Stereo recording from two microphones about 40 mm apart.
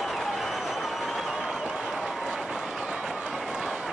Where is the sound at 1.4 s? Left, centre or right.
Centre.